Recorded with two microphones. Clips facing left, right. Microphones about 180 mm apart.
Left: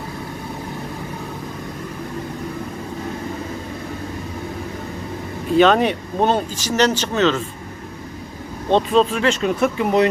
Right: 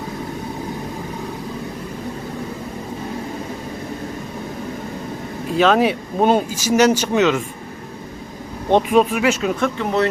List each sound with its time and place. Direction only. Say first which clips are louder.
5.5 s speech: left 1 dB; centre (ahead or behind)
8.7 s speech: right 1 dB; 15° right (ahead or behind)
9.6 s speech: left 3 dB; 10° left (ahead or behind)